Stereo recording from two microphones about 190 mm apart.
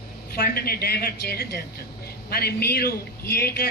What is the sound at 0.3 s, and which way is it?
A man's voice, 55° left (ahead or behind).